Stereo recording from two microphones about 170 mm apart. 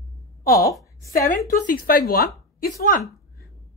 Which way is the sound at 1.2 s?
55° left (ahead or behind).